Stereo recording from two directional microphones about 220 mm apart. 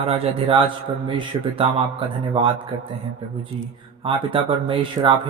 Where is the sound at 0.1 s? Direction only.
25° right (ahead or behind).